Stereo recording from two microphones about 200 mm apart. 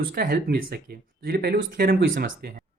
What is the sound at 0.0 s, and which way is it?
Speech, 50° right (ahead or behind).